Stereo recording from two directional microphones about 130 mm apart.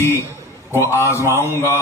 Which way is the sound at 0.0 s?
20° left (ahead or behind).